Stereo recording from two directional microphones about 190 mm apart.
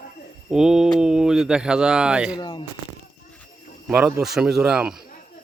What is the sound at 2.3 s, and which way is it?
Speech, 20° left (ahead or behind).